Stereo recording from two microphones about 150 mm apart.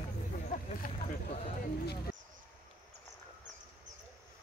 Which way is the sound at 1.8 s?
90° left.